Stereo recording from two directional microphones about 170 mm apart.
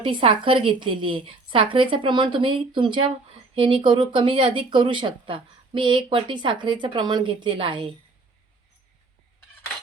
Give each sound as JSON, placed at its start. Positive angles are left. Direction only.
{"t": 0.0, "sound": "a woman's voice", "side_deg": -30}